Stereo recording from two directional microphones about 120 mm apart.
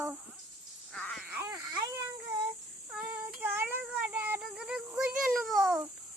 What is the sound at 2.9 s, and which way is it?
Child singing, 10° right (ahead or behind).